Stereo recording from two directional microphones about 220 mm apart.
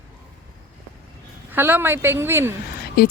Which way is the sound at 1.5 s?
10° right (ahead or behind).